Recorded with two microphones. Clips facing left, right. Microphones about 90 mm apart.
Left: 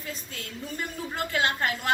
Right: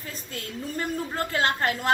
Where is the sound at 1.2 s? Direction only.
35° right (ahead or behind).